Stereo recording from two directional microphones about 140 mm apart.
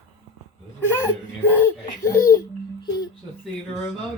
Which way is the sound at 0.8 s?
15° left (ahead or behind).